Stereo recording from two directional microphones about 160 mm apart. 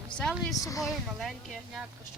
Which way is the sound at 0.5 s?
20° left (ahead or behind).